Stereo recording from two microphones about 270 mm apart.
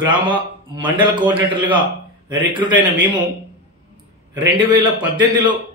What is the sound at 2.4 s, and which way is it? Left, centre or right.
Speech, centre.